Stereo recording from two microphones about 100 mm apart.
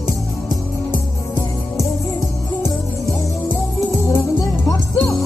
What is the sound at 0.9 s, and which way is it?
Music, 20° left (ahead or behind).